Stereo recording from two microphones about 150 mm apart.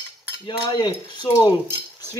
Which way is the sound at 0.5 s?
30° left (ahead or behind).